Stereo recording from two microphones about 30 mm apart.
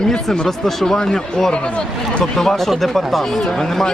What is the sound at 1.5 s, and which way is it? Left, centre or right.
Speech, left.